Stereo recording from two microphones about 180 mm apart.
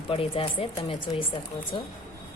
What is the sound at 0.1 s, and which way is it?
A woman's voice, 30° left (ahead or behind).